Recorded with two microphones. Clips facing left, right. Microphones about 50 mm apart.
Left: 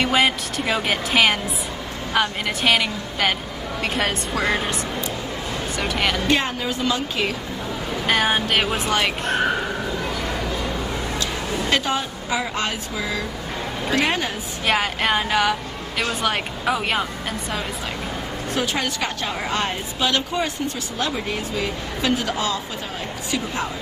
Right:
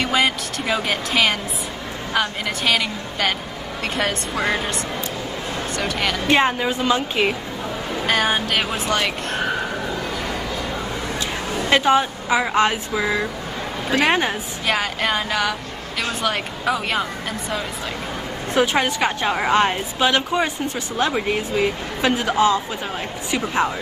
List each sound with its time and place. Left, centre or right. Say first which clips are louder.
0.0 s a woman's voice: left 1 dB; centre
5.8 s a woman's voice: left 1 dB; centre
6.2 s a woman's voice: right 4 dB; right
8.1 s a woman's voice: even; centre
11.7 s a woman's voice: right 8 dB; right
14.7 s a sound: left 1 dB; centre
16.2 s a woman's voice: even; centre
18.5 s a woman's voice: right 6 dB; right